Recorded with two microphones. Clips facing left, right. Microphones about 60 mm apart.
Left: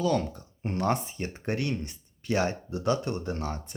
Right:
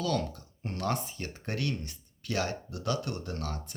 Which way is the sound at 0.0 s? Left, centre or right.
Left.